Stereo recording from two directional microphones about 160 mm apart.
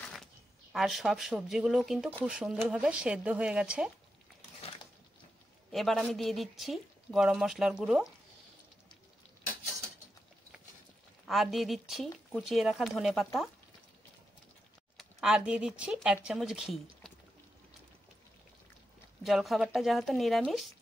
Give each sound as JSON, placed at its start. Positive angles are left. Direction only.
{"t": 0.7, "sound": "speech", "side_deg": 0}
{"t": 5.7, "sound": "speech", "side_deg": 0}
{"t": 11.2, "sound": "speech", "side_deg": 0}
{"t": 15.0, "sound": "speech", "side_deg": -5}
{"t": 19.2, "sound": "speech", "side_deg": 0}